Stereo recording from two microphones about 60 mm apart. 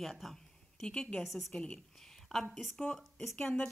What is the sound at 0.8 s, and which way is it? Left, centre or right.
Speech, centre.